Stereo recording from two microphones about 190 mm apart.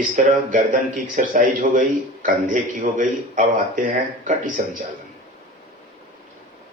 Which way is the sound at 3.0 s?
45° right (ahead or behind).